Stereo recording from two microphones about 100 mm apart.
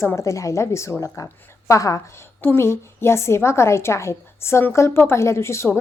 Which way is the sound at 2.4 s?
25° left (ahead or behind).